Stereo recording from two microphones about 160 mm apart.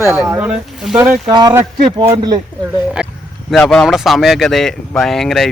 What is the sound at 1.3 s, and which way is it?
A man's voice, 25° right (ahead or behind).